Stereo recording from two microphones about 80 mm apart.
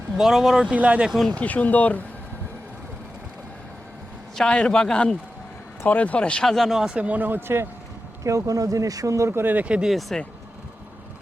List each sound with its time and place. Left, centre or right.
0.2 s speech: centre
1.4 s speech: centre
4.4 s a man's voice: centre
6.5 s speech: centre; by 7.7 s right
8.2 s speech: right; by 9.9 s centre
9.9 s speech: centre